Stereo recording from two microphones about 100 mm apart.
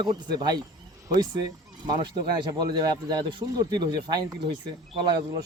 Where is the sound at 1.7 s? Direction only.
45° right (ahead or behind).